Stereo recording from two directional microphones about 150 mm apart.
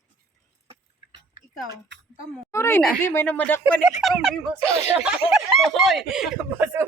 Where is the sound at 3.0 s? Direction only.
15° left (ahead or behind).